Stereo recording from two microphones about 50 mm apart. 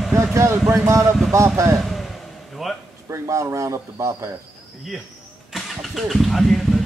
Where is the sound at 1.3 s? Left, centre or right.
Right.